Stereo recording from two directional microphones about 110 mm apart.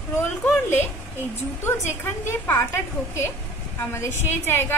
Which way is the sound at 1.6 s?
20° left (ahead or behind).